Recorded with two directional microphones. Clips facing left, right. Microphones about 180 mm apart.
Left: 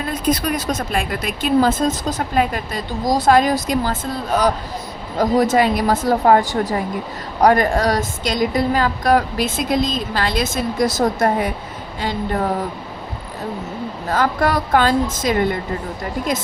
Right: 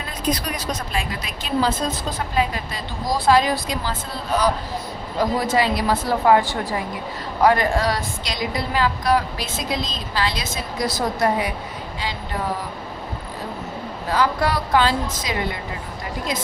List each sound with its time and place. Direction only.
0.3 s speech: 50° left (ahead or behind)
14.1 s speech: 45° left (ahead or behind)